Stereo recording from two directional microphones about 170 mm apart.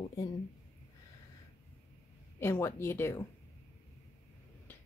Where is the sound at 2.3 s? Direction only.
15° left (ahead or behind).